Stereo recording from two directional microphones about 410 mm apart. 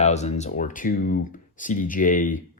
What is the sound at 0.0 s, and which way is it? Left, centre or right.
Speech, centre.